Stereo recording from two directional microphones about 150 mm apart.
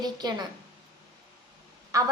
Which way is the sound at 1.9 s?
20° right (ahead or behind).